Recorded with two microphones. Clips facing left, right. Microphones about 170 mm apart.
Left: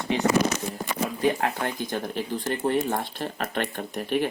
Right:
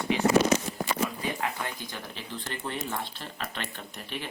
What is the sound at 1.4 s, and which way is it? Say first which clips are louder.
Speech: left 6 dB; 55° left (ahead or behind).